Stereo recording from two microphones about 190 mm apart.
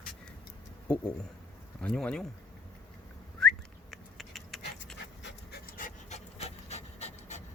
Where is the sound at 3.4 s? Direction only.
Centre (ahead or behind).